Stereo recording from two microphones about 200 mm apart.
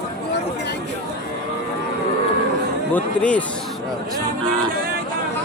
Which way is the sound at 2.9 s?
5° left (ahead or behind).